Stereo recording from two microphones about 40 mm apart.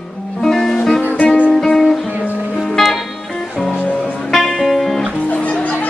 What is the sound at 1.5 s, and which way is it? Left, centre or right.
Music, centre.